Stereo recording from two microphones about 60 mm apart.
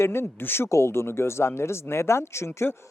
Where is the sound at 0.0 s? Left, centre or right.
Left.